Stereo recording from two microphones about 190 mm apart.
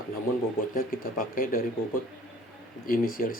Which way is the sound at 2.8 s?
50° left (ahead or behind).